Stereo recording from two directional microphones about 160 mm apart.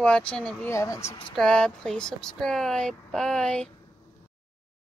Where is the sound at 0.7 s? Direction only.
20° left (ahead or behind).